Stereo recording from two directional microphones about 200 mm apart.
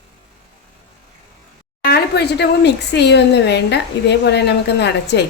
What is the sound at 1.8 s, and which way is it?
Speech, 55° left (ahead or behind).